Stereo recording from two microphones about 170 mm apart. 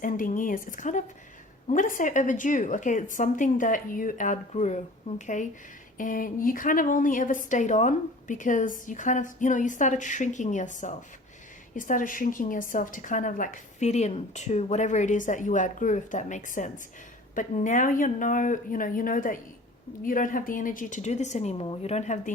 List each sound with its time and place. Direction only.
0.0 s a woman's voice: 50° left (ahead or behind)